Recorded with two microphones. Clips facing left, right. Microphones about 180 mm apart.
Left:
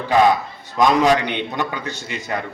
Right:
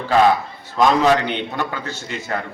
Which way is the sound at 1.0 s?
15° left (ahead or behind).